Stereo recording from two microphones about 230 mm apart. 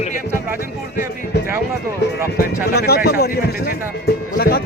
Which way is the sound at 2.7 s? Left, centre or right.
Left.